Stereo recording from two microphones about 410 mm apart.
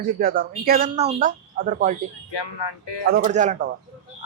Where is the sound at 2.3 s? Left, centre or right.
Left.